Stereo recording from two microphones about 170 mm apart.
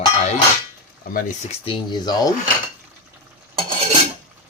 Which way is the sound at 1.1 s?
45° left (ahead or behind).